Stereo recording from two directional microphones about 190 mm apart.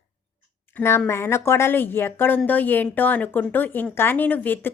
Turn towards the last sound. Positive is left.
turn(degrees=10)  # may be behind; listen again after turning